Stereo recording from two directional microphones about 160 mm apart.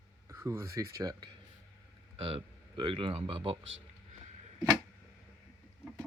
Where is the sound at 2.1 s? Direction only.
40° right (ahead or behind).